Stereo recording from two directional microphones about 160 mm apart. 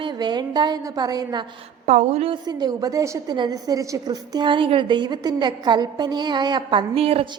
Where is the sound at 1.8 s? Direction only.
45° right (ahead or behind).